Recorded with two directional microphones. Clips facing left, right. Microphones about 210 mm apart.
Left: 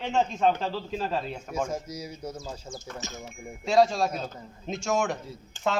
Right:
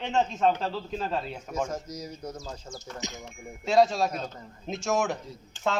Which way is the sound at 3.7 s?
Centre (ahead or behind).